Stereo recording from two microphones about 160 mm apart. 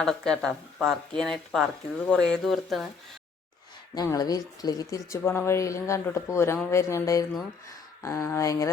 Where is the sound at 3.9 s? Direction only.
25° left (ahead or behind).